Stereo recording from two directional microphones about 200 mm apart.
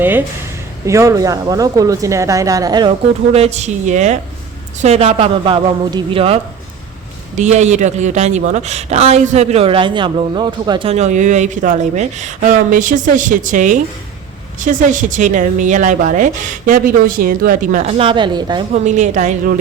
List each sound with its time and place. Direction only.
0.0 s speech: 10° right (ahead or behind)
3.3 s a man's voice: 30° right (ahead or behind)
18.7 s speech: 35° right (ahead or behind)